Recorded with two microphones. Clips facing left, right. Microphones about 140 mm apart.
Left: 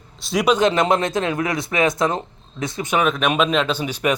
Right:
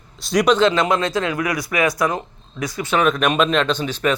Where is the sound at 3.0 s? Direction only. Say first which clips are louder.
Right 1 dB; centre (ahead or behind).